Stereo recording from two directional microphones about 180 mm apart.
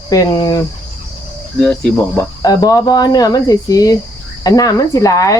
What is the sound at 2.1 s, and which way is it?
Speech, 20° left (ahead or behind).